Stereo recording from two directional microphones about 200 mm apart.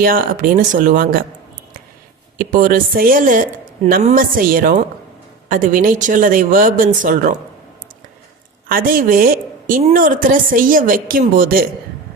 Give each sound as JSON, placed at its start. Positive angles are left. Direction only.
{"t": 0.0, "sound": "a woman's voice", "side_deg": -45}
{"t": 2.4, "sound": "a woman's voice", "side_deg": -45}
{"t": 8.7, "sound": "a woman's voice", "side_deg": -45}